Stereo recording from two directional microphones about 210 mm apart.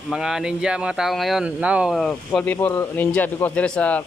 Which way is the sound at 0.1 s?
Centre (ahead or behind).